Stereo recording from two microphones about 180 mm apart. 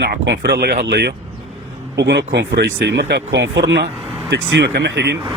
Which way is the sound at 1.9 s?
75° right (ahead or behind).